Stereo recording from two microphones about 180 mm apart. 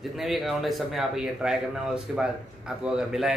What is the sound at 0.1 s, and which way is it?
A man's voice, centre (ahead or behind).